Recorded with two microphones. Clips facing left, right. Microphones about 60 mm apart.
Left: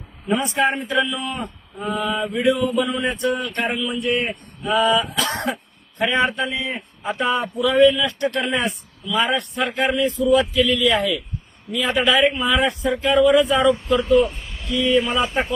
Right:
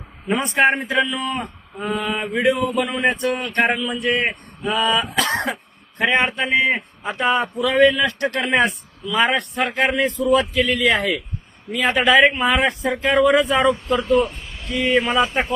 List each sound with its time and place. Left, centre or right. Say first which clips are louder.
0.3 s a man's voice: right 2 dB; right
14.7 s speech: even; right